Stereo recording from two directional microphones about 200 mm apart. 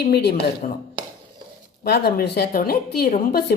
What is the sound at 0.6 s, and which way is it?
Speech, 40° left (ahead or behind).